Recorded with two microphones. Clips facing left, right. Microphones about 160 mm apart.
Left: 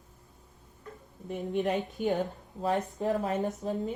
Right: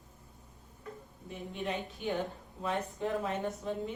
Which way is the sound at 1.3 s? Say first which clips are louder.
Left 8 dB; 40° left (ahead or behind).